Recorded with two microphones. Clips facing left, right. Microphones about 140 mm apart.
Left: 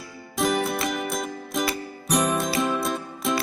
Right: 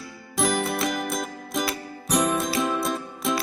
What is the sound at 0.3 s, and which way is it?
Music, centre (ahead or behind).